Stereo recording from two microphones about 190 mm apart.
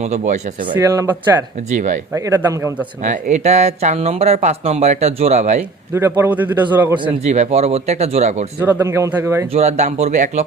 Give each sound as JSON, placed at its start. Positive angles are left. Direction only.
{"t": 0.0, "sound": "speech", "side_deg": -35}
{"t": 2.1, "sound": "a man's voice", "side_deg": -15}
{"t": 3.0, "sound": "speech", "side_deg": -40}
{"t": 5.9, "sound": "a man's voice", "side_deg": -10}
{"t": 7.3, "sound": "speech", "side_deg": -35}
{"t": 8.6, "sound": "a man's voice", "side_deg": -10}
{"t": 9.5, "sound": "speech", "side_deg": -35}